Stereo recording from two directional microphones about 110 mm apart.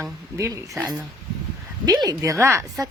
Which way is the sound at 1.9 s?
35° right (ahead or behind).